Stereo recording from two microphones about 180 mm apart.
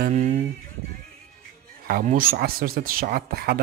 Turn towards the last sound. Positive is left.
turn(degrees=-60)  # may be behind; listen again after turning